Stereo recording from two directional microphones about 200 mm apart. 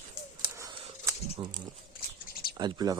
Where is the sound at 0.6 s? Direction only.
15° right (ahead or behind).